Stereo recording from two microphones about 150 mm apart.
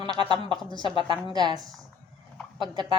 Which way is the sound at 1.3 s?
30° right (ahead or behind).